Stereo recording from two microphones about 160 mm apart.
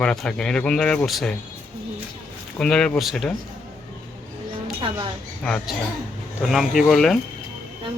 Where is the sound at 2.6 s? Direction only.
5° left (ahead or behind).